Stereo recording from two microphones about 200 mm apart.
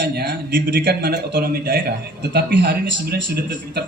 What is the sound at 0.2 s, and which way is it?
A man's voice, 50° right (ahead or behind).